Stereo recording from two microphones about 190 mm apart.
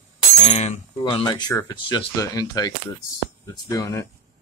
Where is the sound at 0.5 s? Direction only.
30° left (ahead or behind).